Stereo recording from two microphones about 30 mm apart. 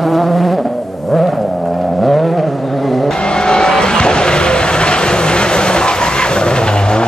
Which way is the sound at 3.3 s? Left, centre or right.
Left.